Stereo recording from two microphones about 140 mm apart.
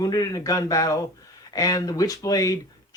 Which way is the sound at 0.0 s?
25° left (ahead or behind).